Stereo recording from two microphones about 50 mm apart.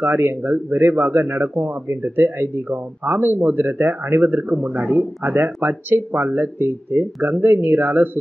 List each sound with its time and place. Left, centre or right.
0.0 s speech: right